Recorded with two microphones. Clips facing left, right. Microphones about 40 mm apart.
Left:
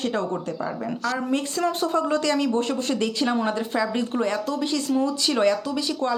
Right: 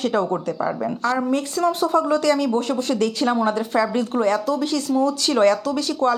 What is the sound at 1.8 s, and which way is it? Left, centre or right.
Speech, left.